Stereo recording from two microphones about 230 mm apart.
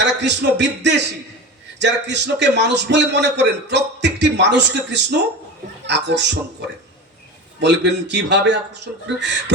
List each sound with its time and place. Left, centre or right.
0.0 s a man's voice: right
7.6 s a man's voice: right